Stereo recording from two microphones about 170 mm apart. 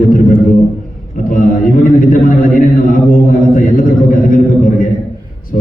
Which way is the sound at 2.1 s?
50° left (ahead or behind).